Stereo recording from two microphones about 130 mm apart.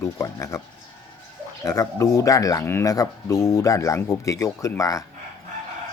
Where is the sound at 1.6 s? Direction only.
25° left (ahead or behind).